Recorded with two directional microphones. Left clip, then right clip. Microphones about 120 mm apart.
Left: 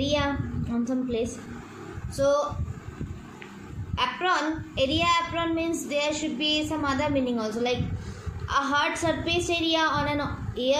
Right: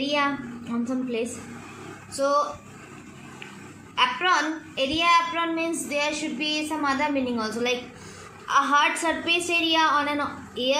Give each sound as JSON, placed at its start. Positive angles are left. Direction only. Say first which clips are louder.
{"t": 0.0, "sound": "a woman's voice", "louder": "right 2 dB", "side_deg": 5}
{"t": 3.9, "sound": "a woman's voice", "louder": "right 4 dB", "side_deg": 5}